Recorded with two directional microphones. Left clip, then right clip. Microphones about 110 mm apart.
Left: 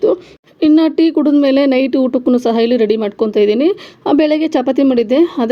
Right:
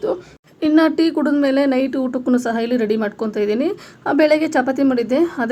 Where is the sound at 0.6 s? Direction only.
20° right (ahead or behind).